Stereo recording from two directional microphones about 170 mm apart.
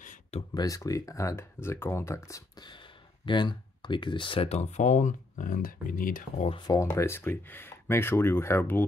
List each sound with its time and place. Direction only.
0.0 s a sound: 50° left (ahead or behind)
0.6 s speech: 20° left (ahead or behind); by 6.4 s 55° left (ahead or behind)
6.4 s speech: 30° left (ahead or behind)
6.8 s speech: 15° left (ahead or behind)